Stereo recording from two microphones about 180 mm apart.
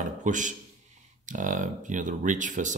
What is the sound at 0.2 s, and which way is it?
Speech, 45° right (ahead or behind).